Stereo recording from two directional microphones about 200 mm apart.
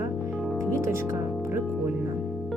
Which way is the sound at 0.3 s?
Centre (ahead or behind).